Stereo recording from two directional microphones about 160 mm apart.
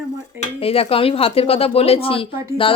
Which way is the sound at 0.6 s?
35° left (ahead or behind).